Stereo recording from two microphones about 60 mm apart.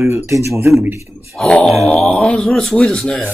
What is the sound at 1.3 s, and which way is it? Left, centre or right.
A man's voice, centre.